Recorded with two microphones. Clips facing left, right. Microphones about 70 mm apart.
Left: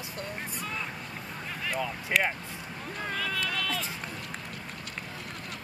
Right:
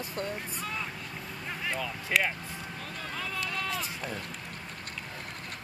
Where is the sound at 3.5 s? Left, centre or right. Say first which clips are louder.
Left 1 dB; right.